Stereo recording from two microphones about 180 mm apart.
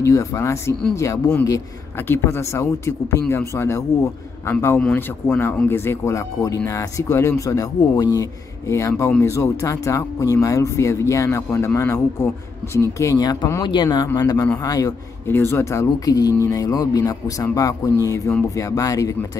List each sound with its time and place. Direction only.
0.0 s speech: 20° left (ahead or behind)